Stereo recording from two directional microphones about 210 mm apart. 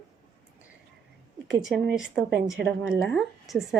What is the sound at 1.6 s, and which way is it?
A woman's voice, centre (ahead or behind).